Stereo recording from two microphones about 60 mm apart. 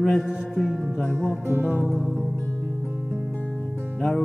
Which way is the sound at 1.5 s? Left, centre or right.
Right.